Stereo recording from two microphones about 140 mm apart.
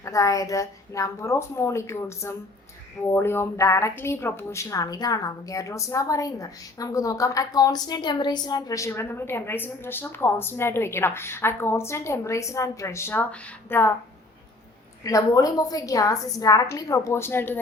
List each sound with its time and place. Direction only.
0.0 s a woman's voice: 25° left (ahead or behind)
15.0 s a woman's voice: 25° left (ahead or behind)